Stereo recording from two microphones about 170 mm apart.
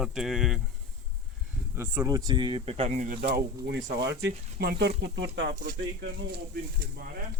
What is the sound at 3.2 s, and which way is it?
Speech, 80° right.